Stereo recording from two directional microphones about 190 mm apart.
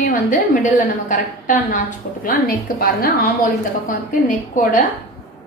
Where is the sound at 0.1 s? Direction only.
40° left (ahead or behind).